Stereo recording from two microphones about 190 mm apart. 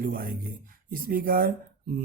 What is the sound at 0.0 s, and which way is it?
Speech, 50° right (ahead or behind).